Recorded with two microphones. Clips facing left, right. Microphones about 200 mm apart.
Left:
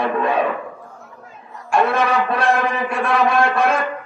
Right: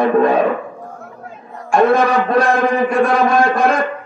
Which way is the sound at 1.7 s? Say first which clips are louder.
Right 5 dB; 40° right (ahead or behind).